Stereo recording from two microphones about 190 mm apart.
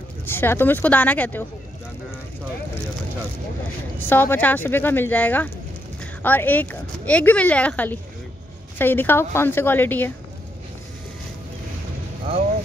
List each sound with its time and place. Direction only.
0.2 s a woman's voice: 10° left (ahead or behind)
4.1 s a woman's voice: 10° left (ahead or behind)